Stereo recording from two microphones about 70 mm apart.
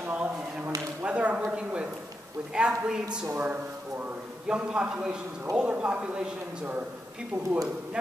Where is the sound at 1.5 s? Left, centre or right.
Centre.